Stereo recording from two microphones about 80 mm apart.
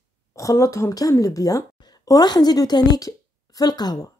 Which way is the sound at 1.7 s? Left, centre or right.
Left.